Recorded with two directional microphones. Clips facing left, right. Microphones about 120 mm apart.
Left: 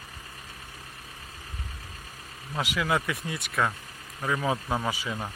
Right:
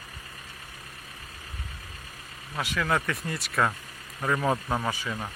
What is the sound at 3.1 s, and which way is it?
Speech, centre (ahead or behind).